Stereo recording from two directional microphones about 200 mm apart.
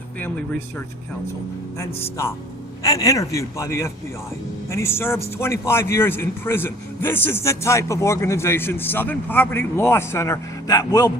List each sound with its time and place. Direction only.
1.8 s speech: 15° left (ahead or behind)